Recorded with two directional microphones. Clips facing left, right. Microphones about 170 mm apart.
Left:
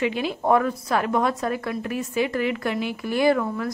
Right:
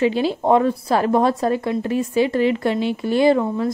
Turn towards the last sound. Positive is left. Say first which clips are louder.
# right 4 dB
turn(degrees=-25)  # may be behind; listen again after turning